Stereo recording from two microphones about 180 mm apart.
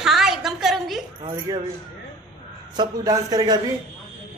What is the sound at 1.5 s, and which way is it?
Speech, 20° right (ahead or behind).